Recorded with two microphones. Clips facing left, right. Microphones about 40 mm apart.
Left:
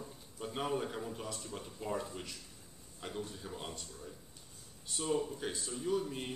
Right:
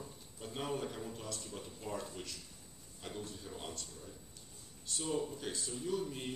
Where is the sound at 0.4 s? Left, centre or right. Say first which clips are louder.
Left 3 dB; centre.